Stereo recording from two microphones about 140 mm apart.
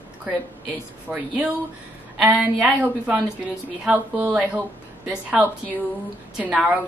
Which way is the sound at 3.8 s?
10° right (ahead or behind).